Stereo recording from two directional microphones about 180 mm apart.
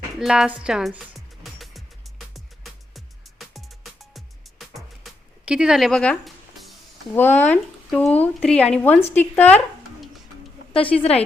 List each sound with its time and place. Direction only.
0.2 s a woman's voice: 5° right (ahead or behind)
1.5 s music: centre (ahead or behind)
7.2 s speech: 10° left (ahead or behind)
10.8 s a woman's voice: 35° left (ahead or behind)